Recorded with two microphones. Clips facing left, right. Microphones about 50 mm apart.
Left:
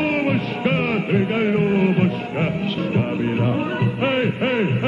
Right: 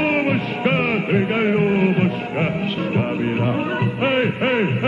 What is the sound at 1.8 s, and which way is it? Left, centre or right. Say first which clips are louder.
Music: even; centre.